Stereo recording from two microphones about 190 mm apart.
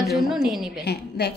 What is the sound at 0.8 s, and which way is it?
Speech, 60° left (ahead or behind).